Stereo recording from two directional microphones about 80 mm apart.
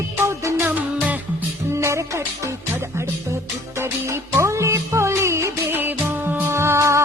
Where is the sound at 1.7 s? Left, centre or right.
Right.